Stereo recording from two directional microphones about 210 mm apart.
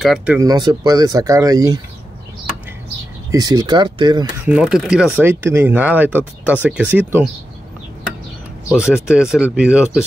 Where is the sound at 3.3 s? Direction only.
20° right (ahead or behind).